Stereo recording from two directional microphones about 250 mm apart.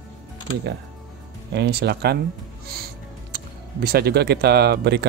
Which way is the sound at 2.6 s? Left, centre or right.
Right.